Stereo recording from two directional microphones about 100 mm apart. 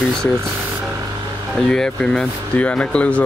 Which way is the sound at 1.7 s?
5° left (ahead or behind).